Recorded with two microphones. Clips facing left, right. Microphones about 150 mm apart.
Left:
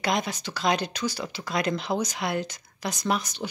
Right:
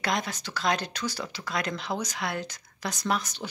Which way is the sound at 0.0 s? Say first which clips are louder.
Left 3 dB; 20° left (ahead or behind).